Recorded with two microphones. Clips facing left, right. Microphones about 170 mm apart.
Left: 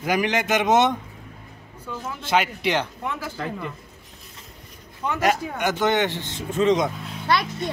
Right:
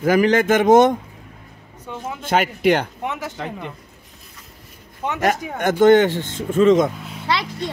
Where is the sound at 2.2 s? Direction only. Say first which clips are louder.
Right 3 dB; 50° right (ahead or behind).